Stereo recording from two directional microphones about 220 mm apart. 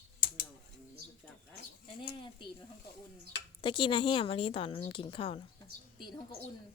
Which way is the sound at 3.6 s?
20° left (ahead or behind).